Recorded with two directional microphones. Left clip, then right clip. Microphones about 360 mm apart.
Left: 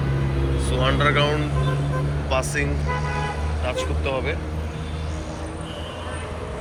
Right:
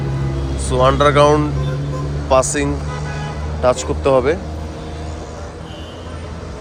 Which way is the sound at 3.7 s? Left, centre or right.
Centre.